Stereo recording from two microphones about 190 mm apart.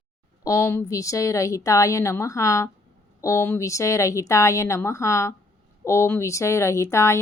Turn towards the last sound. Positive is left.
turn(degrees=15)  # may be behind; listen again after turning